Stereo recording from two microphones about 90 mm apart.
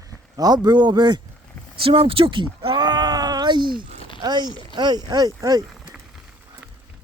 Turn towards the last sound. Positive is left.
turn(degrees=-40)  # may be behind; listen again after turning